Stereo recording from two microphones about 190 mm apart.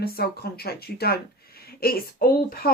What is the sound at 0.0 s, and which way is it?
Speech, 55° left (ahead or behind).